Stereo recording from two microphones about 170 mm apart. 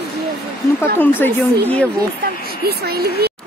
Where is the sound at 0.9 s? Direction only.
10° left (ahead or behind).